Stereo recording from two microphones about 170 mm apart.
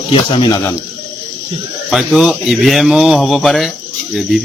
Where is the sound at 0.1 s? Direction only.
30° left (ahead or behind).